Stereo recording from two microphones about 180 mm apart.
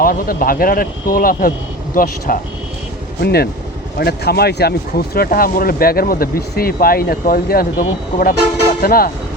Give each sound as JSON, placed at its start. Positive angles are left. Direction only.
{"t": 0.0, "sound": "speech", "side_deg": 55}
{"t": 3.2, "sound": "speech", "side_deg": 65}